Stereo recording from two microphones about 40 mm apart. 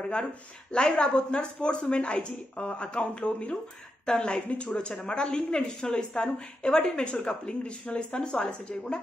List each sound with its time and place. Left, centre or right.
0.0 s speech: left
4.7 s speech: centre